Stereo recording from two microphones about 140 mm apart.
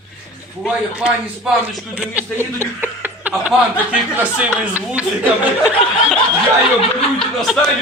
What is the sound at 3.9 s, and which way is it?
Speech, 10° right (ahead or behind).